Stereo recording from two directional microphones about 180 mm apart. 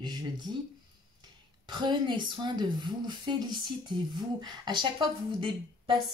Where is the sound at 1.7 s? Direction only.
25° right (ahead or behind).